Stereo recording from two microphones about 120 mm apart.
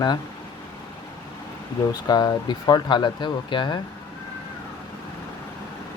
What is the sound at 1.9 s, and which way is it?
Speech, 35° left (ahead or behind).